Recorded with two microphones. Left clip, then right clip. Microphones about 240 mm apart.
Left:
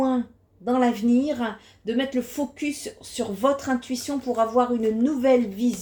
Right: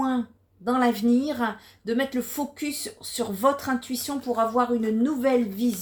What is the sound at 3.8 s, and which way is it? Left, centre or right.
Speech, right.